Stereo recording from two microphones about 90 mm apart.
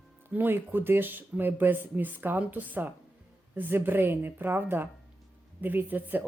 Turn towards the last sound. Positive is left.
turn(degrees=-20)  # may be behind; listen again after turning